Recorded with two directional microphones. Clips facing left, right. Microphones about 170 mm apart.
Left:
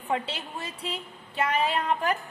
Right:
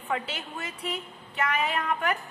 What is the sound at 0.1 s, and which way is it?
A woman's voice, 30° left (ahead or behind).